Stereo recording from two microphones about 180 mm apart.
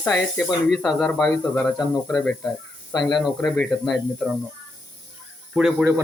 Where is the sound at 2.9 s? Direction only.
20° left (ahead or behind).